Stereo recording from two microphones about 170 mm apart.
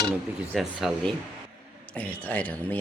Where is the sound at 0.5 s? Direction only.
Centre (ahead or behind).